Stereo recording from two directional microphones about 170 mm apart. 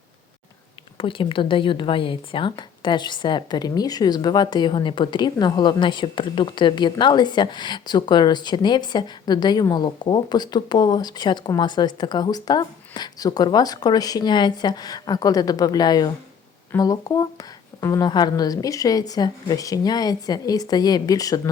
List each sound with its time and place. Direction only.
0.9 s a woman's voice: 30° left (ahead or behind)